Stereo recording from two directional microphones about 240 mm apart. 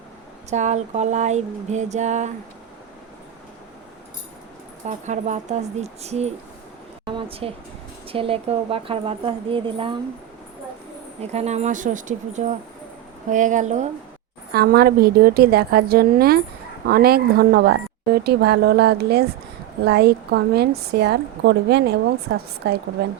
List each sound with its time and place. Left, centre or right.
0.5 s speech: right
4.9 s speech: right
11.2 s a woman's voice: right
14.5 s a woman's voice: right